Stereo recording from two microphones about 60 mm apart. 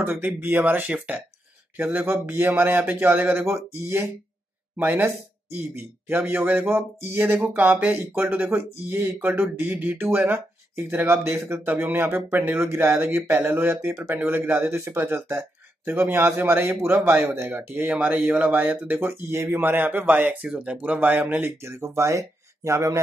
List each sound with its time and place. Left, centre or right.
0.0 s speech: right
1.8 s speech: right
4.7 s speech: right
7.5 s speech: right
9.8 s speech: right
10.1 s speech: right
17.8 s speech: right